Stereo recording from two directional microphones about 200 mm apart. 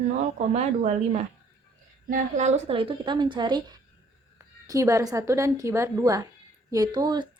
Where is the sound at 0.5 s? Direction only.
35° right (ahead or behind).